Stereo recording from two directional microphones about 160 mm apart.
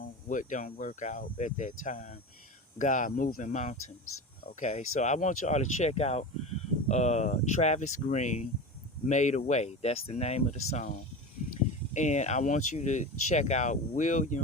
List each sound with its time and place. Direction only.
0.0 s speech: 55° left (ahead or behind)
11.9 s speech: 45° left (ahead or behind)